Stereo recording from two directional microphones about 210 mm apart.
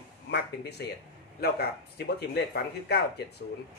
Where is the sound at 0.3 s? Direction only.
50° left (ahead or behind).